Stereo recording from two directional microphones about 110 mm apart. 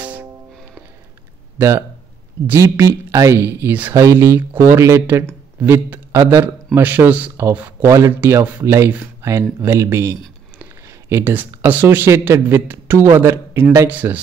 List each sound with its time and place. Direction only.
0.0 s music: 15° right (ahead or behind)
1.6 s a man's voice: 25° right (ahead or behind)